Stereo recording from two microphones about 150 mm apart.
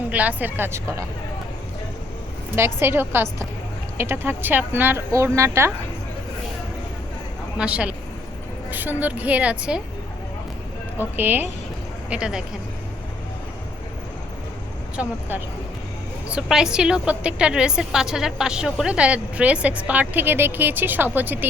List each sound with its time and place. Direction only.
0.1 s a woman's voice: 10° right (ahead or behind)
2.6 s a woman's voice: 15° right (ahead or behind)
7.6 s a woman's voice: 10° right (ahead or behind)
11.2 s a woman's voice: 15° right (ahead or behind)
15.0 s a woman's voice: 5° right (ahead or behind)
16.3 s a woman's voice: 5° right (ahead or behind)